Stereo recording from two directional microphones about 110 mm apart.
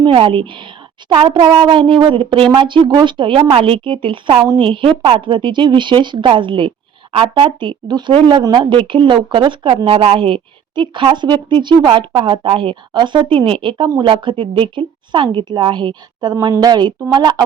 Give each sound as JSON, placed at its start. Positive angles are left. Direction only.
{"t": 0.0, "sound": "speech", "side_deg": -50}